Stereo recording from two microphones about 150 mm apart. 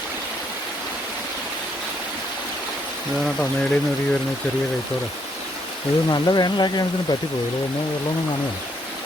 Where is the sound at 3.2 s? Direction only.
5° left (ahead or behind).